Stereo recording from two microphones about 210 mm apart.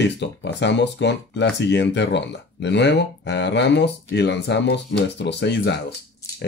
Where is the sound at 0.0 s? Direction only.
55° left (ahead or behind).